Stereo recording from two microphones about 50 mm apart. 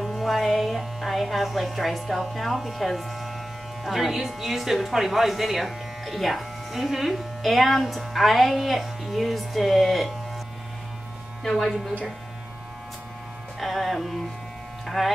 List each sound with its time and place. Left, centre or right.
0.0 s speech: centre
11.4 s speech: centre
13.6 s speech: centre